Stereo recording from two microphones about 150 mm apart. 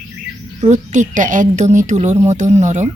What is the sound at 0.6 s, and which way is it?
Speech, 55° right (ahead or behind).